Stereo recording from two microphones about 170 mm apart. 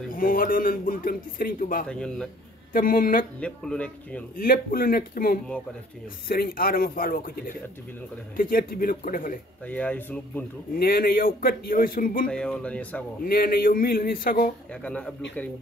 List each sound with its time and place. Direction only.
0.1 s speech: 55° left (ahead or behind)
1.9 s speech: 5° left (ahead or behind)
2.7 s speech: 55° left (ahead or behind)
3.3 s speech: 5° left (ahead or behind)
4.4 s speech: 60° left (ahead or behind)
9.7 s speech: 10° left (ahead or behind)
10.7 s speech: 60° left (ahead or behind)
12.3 s speech: 5° left (ahead or behind)
13.2 s speech: 60° left (ahead or behind)
14.7 s speech: 5° left (ahead or behind)